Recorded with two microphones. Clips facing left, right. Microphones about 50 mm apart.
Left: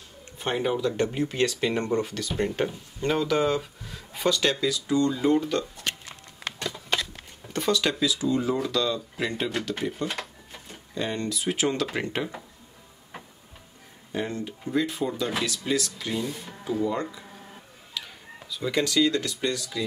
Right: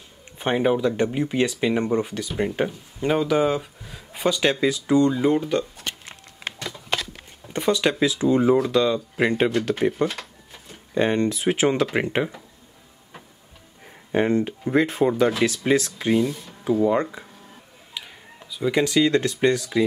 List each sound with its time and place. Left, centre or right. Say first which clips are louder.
0.4 s speech: right 5 dB; right
7.4 s speech: right 4 dB; right
10.0 s cash register: right 4 dB; centre
11.0 s speech: right 8 dB; right
14.1 s speech: right 10 dB; right
18.0 s a sound: even; centre
18.5 s speech: right 5 dB; centre; by 19.8 s right